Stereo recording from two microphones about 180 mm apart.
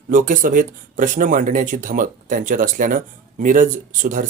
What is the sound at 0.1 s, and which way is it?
Speech, 50° right (ahead or behind).